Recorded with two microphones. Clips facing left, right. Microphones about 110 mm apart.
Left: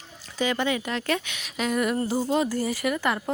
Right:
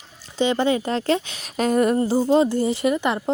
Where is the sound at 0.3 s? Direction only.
30° right (ahead or behind).